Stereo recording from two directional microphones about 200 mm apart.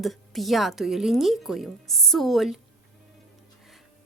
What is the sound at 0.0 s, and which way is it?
Speech, centre (ahead or behind).